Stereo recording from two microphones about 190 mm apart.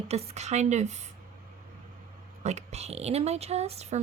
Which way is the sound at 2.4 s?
35° right (ahead or behind).